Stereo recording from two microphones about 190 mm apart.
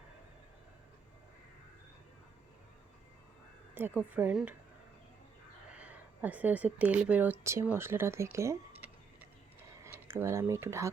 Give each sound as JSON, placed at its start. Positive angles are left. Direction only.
{"t": 3.8, "sound": "speech", "side_deg": -10}
{"t": 5.7, "sound": "speech", "side_deg": -5}